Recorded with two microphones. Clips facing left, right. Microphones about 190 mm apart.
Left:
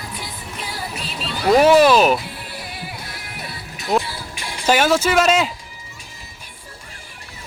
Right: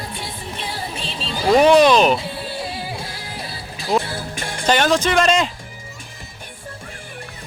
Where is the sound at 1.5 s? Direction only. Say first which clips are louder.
Even; 5° left (ahead or behind).